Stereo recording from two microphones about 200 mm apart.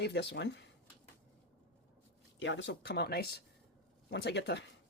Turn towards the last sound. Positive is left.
turn(degrees=60)  # may be behind; listen again after turning